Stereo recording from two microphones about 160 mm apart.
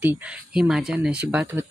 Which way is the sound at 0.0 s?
10° right (ahead or behind).